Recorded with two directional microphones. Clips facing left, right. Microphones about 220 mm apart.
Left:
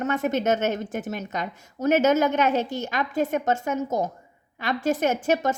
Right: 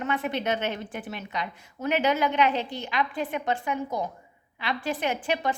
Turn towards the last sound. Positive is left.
turn(degrees=45)  # may be behind; listen again after turning